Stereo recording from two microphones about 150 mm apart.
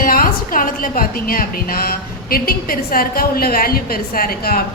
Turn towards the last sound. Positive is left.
turn(degrees=85)